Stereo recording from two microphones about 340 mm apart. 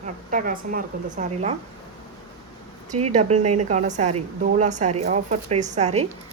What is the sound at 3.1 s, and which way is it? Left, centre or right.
A woman's voice, right.